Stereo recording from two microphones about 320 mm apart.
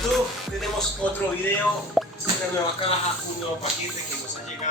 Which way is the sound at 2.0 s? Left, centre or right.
Centre.